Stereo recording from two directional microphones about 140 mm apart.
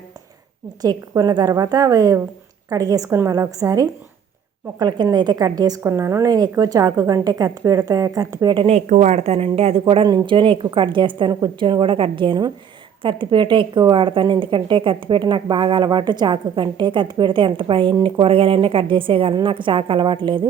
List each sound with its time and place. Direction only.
0.8 s a woman's voice: 25° right (ahead or behind)
8.9 s a woman's voice: 55° right (ahead or behind); by 20.5 s 35° right (ahead or behind)